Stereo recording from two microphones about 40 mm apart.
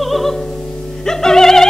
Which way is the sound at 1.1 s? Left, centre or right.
Centre.